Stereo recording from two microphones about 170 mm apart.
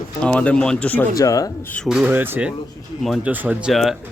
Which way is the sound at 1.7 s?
Centre (ahead or behind).